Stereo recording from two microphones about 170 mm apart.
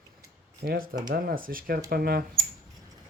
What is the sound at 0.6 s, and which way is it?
Speech, 60° right (ahead or behind).